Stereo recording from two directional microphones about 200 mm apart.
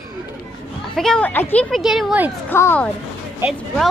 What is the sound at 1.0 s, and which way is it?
A child's voice, 5° left (ahead or behind).